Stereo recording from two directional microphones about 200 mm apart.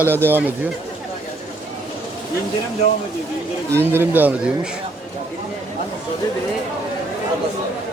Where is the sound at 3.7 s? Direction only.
10° right (ahead or behind).